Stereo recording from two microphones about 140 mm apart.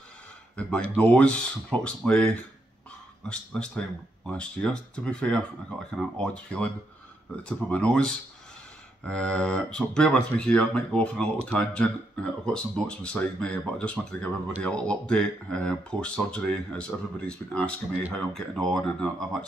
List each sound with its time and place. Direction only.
0.6 s speech: 10° left (ahead or behind)
0.8 s speech: 50° right (ahead or behind)
1.1 s speech: 10° left (ahead or behind)